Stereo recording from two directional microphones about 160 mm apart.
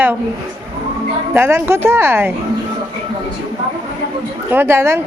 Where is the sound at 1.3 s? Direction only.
15° right (ahead or behind).